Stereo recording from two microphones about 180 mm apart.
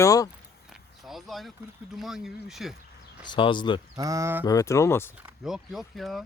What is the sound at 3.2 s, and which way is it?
Speech, 25° left (ahead or behind).